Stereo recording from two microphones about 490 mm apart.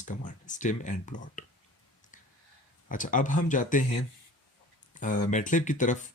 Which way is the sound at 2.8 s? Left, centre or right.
Centre.